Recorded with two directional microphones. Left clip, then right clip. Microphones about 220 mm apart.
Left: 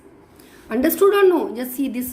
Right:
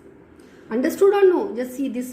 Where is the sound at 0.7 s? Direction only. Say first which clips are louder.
Left 1 dB; 30° left (ahead or behind).